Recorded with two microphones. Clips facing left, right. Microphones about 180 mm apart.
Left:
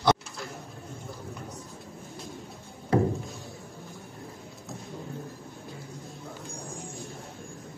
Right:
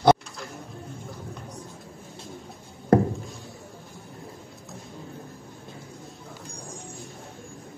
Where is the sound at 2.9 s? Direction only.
50° right (ahead or behind).